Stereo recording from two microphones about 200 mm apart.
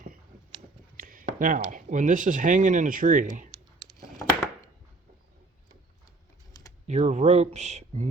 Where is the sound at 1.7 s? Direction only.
40° right (ahead or behind).